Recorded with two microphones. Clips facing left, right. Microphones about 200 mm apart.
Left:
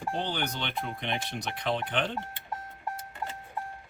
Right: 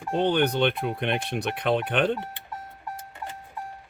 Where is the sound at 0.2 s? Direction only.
60° right (ahead or behind).